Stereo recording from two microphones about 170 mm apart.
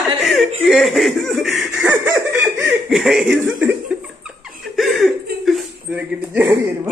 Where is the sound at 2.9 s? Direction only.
Centre (ahead or behind).